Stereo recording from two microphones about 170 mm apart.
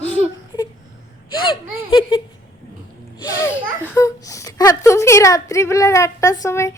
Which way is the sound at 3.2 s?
20° left (ahead or behind).